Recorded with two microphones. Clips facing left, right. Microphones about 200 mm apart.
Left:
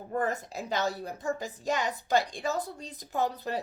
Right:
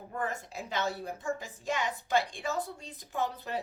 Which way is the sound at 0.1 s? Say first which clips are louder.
Left 6 dB; 40° left (ahead or behind).